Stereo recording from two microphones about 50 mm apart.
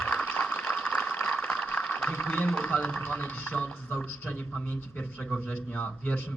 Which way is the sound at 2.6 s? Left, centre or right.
Left.